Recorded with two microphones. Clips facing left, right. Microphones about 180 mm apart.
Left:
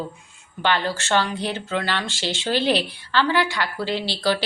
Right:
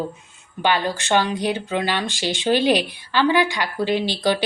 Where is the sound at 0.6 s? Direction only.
15° right (ahead or behind).